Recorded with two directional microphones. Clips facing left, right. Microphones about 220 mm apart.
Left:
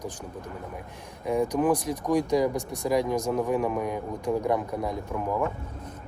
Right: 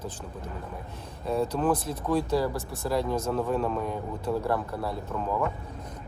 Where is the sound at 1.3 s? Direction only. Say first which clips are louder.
Left 2 dB; 15° left (ahead or behind).